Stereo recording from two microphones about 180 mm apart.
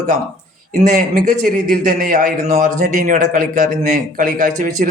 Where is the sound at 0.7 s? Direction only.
45° right (ahead or behind).